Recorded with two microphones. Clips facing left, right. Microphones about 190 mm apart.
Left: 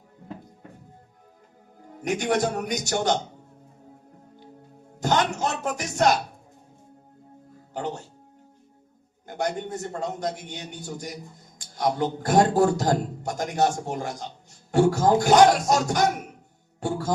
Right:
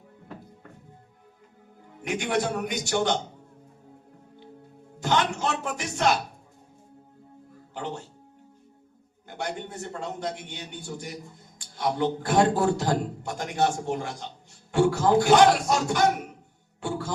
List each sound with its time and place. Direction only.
1.9 s a man's voice: 40° left (ahead or behind)
4.9 s music: 40° left (ahead or behind)
7.7 s speech: 40° left (ahead or behind)
9.2 s a man's voice: 40° left (ahead or behind)
16.8 s music: 40° left (ahead or behind)